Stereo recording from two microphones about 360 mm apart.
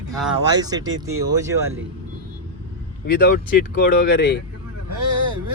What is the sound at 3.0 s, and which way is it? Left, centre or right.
Speech, left.